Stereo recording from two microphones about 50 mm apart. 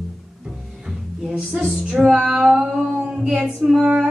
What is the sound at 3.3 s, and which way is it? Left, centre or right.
Female singing, right.